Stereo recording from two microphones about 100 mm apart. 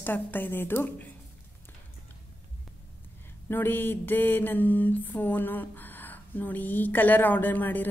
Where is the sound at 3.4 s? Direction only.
20° left (ahead or behind).